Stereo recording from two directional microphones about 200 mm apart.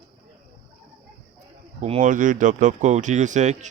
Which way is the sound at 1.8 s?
40° right (ahead or behind).